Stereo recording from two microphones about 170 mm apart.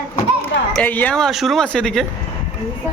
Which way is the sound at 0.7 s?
10° left (ahead or behind).